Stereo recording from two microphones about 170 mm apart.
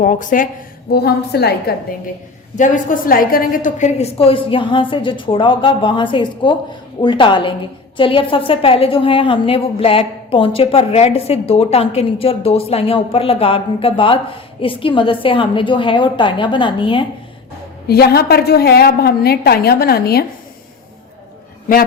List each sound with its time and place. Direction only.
0.0 s speech: 50° left (ahead or behind)
0.9 s a woman's voice: 70° left (ahead or behind)
2.6 s a woman's voice: 50° left (ahead or behind); by 17.1 s 30° left (ahead or behind)
17.8 s a woman's voice: 65° left (ahead or behind)